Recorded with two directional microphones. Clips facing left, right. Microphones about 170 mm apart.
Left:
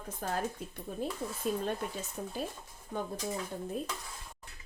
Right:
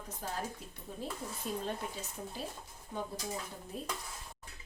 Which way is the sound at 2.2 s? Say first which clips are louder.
Left 5 dB; 60° left (ahead or behind).